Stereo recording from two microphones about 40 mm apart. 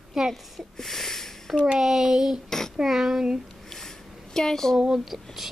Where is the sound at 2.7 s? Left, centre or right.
Centre.